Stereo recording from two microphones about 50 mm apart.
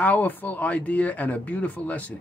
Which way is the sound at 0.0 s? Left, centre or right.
Left.